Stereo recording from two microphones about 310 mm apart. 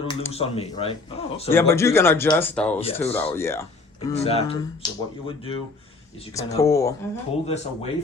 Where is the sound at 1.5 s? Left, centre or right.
Centre.